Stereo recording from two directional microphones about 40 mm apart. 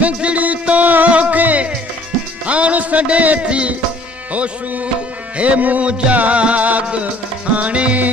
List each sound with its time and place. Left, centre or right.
0.0 s music: right
4.3 s speech: right
5.4 s music: right
5.9 s music: right